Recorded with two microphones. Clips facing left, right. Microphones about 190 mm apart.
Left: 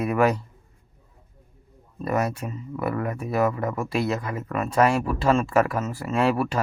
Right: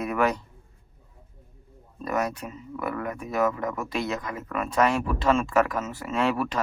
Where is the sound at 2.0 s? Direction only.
5° left (ahead or behind).